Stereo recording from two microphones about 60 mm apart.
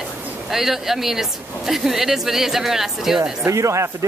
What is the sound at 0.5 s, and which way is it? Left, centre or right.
A woman's voice, centre.